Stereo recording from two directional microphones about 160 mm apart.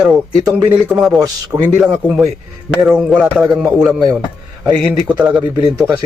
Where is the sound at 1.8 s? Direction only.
5° right (ahead or behind).